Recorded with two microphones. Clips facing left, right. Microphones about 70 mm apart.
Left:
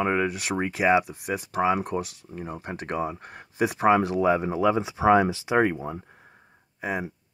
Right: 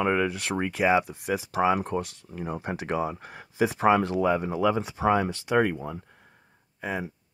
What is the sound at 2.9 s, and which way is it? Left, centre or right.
Speech, centre.